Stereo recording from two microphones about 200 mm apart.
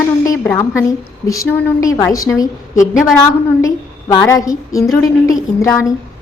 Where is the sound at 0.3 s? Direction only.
10° left (ahead or behind).